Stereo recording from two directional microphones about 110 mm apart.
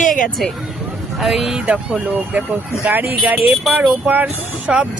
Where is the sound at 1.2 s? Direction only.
Centre (ahead or behind).